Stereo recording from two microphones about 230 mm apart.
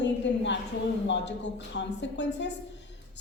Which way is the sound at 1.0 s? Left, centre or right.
Left.